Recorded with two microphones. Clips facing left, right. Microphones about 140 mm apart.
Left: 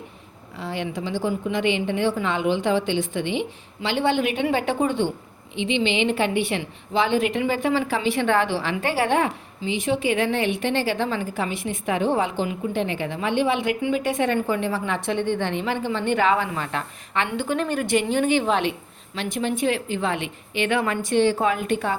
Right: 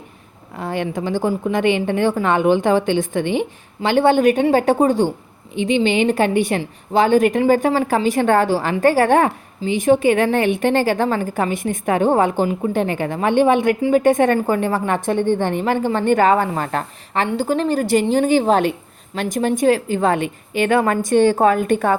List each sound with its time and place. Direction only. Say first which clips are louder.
0.5 s a woman's voice: right 6 dB; 50° right (ahead or behind)